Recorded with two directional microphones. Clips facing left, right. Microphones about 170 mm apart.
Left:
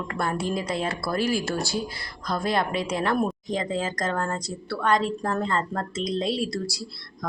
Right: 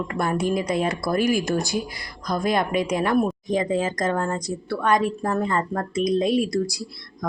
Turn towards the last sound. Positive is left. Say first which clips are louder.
# right 6 dB
turn(degrees=-15)  # may be behind; listen again after turning